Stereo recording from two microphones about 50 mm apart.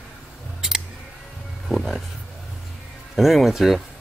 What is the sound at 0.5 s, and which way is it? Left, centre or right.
Scissors, centre.